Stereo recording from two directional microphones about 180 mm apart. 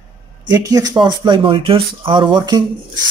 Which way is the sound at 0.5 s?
20° right (ahead or behind).